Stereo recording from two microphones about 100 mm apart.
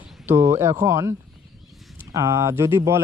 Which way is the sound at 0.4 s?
30° right (ahead or behind).